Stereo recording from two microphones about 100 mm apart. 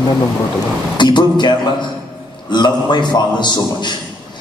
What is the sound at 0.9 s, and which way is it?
Speech, 50° left (ahead or behind).